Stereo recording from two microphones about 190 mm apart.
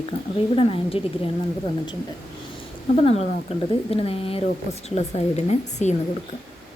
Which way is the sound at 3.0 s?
35° left (ahead or behind).